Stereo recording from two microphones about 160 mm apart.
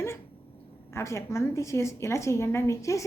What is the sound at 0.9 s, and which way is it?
A woman's voice, 15° left (ahead or behind).